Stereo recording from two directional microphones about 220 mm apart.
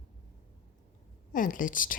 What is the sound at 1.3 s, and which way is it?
Speech, 35° left (ahead or behind).